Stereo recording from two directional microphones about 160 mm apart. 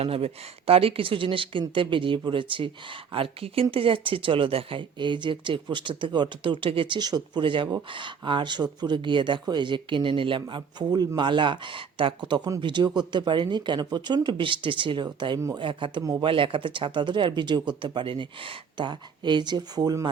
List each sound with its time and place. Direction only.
0.0 s speech: 40° right (ahead or behind); by 20.1 s 25° right (ahead or behind)